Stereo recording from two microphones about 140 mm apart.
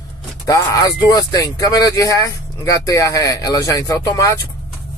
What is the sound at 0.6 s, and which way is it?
Speech, 30° left (ahead or behind).